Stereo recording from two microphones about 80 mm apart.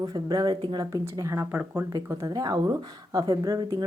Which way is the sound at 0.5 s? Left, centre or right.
Right.